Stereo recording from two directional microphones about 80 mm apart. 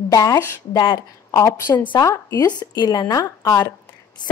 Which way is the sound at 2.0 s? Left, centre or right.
Left.